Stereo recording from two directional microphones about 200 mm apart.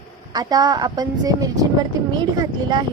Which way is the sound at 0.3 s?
20° right (ahead or behind).